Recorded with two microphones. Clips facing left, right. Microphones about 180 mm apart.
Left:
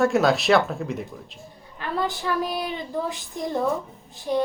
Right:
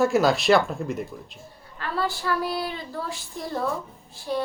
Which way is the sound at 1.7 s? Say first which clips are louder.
Left 1 dB; 15° left (ahead or behind).